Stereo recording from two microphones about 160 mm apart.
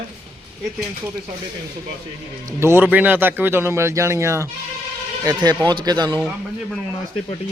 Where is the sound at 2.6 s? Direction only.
15° right (ahead or behind).